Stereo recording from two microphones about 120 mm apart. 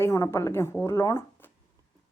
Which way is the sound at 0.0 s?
25° left (ahead or behind).